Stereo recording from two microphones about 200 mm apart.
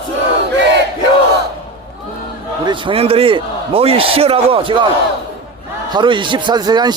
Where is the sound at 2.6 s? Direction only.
25° right (ahead or behind).